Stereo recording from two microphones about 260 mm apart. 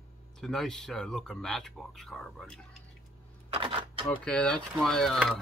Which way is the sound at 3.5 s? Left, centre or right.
Centre.